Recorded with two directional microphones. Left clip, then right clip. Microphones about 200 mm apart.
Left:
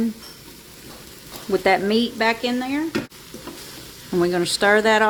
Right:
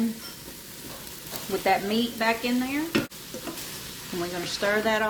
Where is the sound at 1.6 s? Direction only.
60° left (ahead or behind).